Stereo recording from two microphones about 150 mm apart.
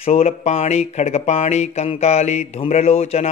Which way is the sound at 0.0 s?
40° left (ahead or behind).